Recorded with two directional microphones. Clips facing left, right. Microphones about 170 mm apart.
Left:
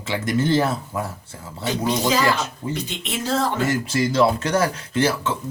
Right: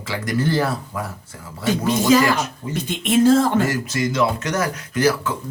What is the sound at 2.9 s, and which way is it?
Speech, 50° right (ahead or behind).